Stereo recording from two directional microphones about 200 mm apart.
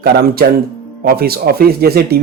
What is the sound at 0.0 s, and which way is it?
Speech, 50° right (ahead or behind).